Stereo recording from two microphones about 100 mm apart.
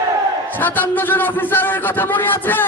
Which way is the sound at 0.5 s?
20° left (ahead or behind).